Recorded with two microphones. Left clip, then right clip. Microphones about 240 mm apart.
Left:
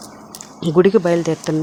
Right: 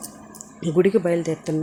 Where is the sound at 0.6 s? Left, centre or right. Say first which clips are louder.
Left 5 dB; centre.